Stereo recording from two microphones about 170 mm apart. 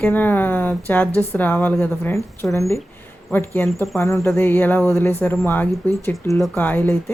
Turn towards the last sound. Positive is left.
turn(degrees=10)  # may be behind; listen again after turning